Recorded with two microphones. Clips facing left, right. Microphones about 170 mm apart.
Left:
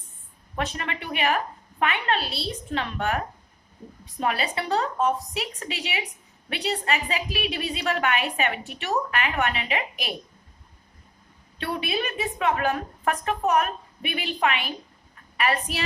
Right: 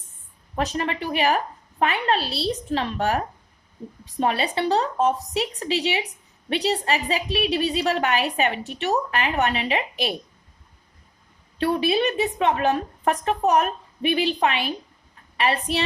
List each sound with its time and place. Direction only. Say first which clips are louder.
0.5 s a woman's voice: right 5 dB; 35° right (ahead or behind)
4.2 s a woman's voice: right 4 dB; 30° right (ahead or behind)
11.6 s a woman's voice: right 7 dB; 30° right (ahead or behind)